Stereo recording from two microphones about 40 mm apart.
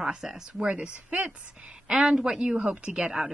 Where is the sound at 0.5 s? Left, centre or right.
Right.